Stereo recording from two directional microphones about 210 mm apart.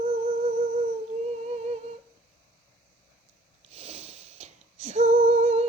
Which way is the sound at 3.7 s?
30° right (ahead or behind).